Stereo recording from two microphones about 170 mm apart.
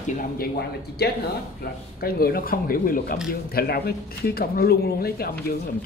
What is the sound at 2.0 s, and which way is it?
A woman's voice, 60° left (ahead or behind).